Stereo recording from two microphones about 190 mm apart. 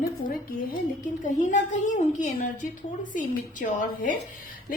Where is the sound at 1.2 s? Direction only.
40° left (ahead or behind).